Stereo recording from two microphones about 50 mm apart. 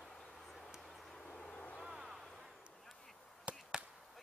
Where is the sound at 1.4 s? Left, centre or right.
Left.